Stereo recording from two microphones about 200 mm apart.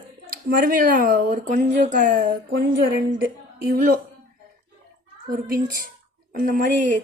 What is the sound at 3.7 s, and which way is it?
Speech, 50° right (ahead or behind).